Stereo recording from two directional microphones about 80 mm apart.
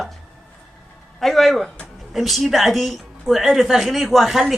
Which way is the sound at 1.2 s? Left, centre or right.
Centre.